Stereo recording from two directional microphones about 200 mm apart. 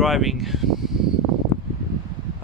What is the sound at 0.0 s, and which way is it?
Speech, centre (ahead or behind).